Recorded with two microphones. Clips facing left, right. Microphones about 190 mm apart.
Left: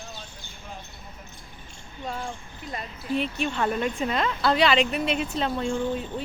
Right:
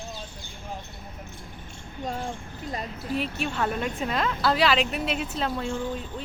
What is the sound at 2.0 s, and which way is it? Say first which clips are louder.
Speech: right 2 dB; 40° right (ahead or behind).